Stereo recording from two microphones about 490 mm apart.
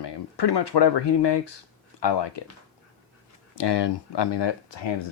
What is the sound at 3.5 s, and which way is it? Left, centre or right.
Speech, left.